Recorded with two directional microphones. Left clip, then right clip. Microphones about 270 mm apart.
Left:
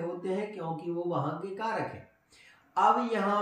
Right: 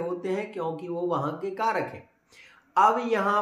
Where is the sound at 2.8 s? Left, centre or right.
Centre.